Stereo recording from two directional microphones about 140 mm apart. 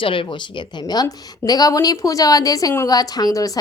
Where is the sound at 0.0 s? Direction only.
35° left (ahead or behind).